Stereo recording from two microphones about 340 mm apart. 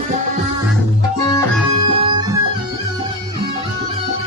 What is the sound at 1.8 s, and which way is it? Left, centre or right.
Music, centre.